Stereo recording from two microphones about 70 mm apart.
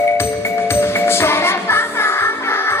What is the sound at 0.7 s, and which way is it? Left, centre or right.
Music, left.